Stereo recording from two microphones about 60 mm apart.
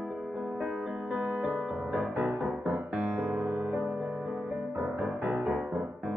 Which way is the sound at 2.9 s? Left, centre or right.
Right.